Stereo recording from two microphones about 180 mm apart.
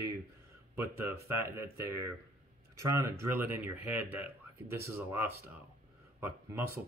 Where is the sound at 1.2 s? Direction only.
15° right (ahead or behind).